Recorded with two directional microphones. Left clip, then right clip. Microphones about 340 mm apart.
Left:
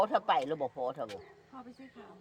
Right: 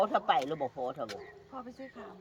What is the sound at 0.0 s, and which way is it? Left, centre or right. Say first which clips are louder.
Speech: even; left.